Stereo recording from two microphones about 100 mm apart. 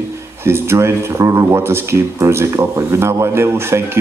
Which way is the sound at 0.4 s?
25° right (ahead or behind).